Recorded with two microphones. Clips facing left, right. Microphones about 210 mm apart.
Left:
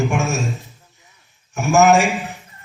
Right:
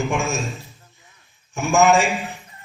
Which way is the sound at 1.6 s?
45° left (ahead or behind).